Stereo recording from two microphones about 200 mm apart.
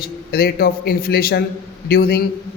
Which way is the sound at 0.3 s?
50° left (ahead or behind).